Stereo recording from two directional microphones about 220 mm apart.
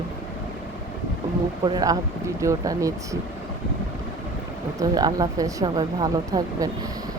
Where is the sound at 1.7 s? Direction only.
20° right (ahead or behind).